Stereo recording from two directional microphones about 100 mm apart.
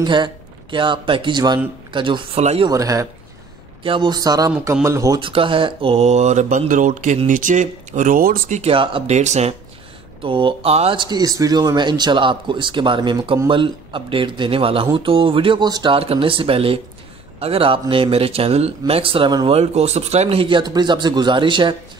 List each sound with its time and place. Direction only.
0.0 s speech: 50° right (ahead or behind)
2.3 s speech: 90° right
2.7 s speech: 35° right (ahead or behind)
3.8 s speech: 55° right (ahead or behind); by 5.2 s 30° right (ahead or behind)
5.2 s speech: 60° right (ahead or behind); by 6.7 s 90° right
8.6 s speech: 60° right (ahead or behind); by 9.6 s 90° right
10.2 s speech: 60° right (ahead or behind); by 11.0 s 80° right
11.0 s speech: 40° right (ahead or behind)
16.0 s speech: 70° right (ahead or behind)
19.4 s speech: 85° right; by 21.7 s 55° right (ahead or behind)